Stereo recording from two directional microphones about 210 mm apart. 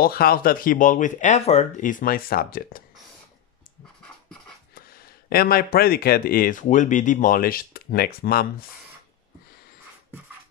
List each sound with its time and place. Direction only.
0.0 s speech: 45° left (ahead or behind)
4.7 s speech: 45° left (ahead or behind)